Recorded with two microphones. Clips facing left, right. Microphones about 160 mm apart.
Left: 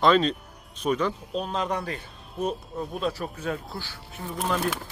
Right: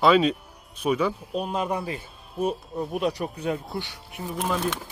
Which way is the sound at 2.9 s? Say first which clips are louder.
Right 3 dB; 20° right (ahead or behind).